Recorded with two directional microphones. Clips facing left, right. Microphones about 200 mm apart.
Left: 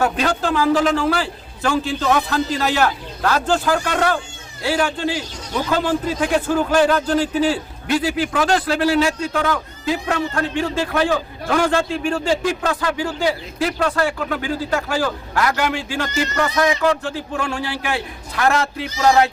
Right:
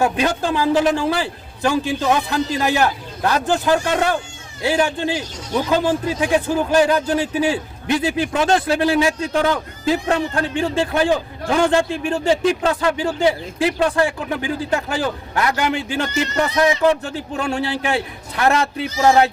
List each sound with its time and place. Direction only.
0.0 s a man's voice: 15° right (ahead or behind)
9.3 s speech: 30° right (ahead or behind)